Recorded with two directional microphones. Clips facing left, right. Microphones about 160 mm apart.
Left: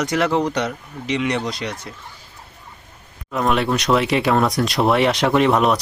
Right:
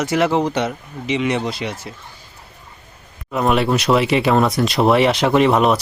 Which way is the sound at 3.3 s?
5° right (ahead or behind).